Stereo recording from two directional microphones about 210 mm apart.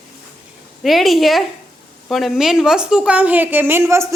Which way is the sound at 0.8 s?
Centre (ahead or behind).